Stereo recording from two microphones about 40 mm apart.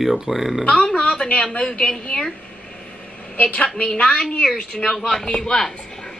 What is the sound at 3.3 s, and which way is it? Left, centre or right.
Speech, left.